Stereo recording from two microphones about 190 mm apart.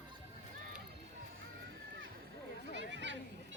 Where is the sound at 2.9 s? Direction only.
70° right (ahead or behind).